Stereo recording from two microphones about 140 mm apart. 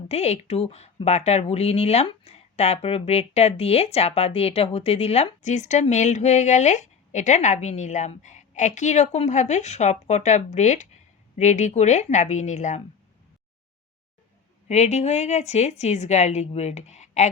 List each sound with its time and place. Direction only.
0.1 s a woman's voice: 50° left (ahead or behind)
14.7 s a woman's voice: 50° left (ahead or behind)